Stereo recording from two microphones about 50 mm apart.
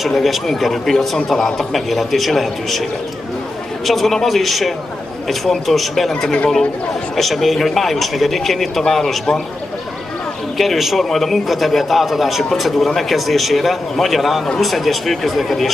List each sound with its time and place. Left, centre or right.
0.0 s a man's voice: centre
3.8 s a man's voice: centre
6.2 s speech: left
7.2 s a man's voice: centre
10.6 s a man's voice: centre